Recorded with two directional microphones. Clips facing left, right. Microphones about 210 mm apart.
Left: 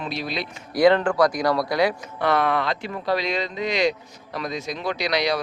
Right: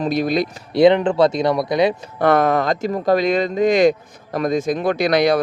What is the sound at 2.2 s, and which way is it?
A man's voice, 45° right (ahead or behind).